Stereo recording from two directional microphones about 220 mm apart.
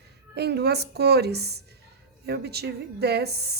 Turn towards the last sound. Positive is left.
turn(degrees=-45)  # may be behind; listen again after turning